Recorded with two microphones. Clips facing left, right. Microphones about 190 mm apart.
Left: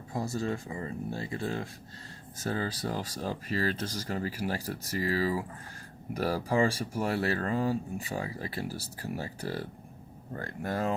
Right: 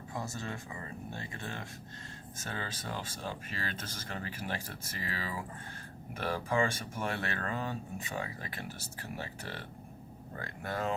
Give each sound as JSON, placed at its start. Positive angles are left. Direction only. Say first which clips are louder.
{"t": 0.1, "sound": "speech", "louder": "left 8 dB", "side_deg": 35}